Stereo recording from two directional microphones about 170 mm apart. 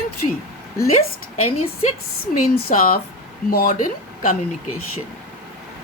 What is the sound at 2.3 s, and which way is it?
A woman's voice, 55° left (ahead or behind).